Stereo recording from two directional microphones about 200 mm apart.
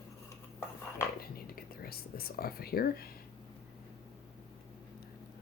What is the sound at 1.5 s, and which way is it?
Whispering, 50° left (ahead or behind).